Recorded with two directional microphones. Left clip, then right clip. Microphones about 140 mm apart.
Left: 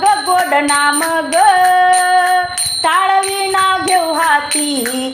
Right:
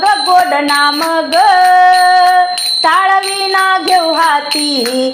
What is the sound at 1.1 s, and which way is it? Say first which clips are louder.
Music: right 2 dB; 25° right (ahead or behind).